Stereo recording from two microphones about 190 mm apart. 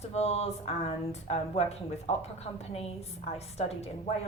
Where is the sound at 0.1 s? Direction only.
35° left (ahead or behind).